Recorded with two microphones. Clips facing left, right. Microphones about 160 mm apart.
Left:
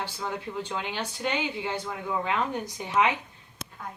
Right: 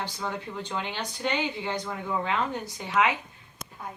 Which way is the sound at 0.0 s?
10° left (ahead or behind).